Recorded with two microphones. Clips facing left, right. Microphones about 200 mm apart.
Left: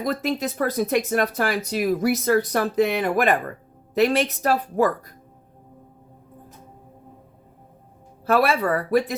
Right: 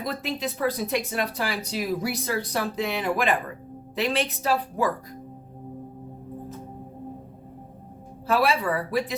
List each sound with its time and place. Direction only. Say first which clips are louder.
0.0 s speech: left 5 dB; 45° left (ahead or behind)
8.3 s speech: left 3 dB; 55° left (ahead or behind)